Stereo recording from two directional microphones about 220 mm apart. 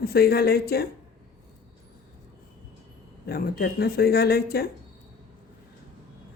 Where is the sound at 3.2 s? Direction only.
45° left (ahead or behind).